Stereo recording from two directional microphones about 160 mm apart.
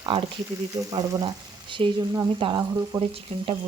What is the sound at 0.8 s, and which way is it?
Speech, 25° right (ahead or behind).